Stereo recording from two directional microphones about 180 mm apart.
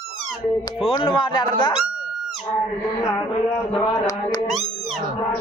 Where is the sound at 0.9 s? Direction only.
25° left (ahead or behind).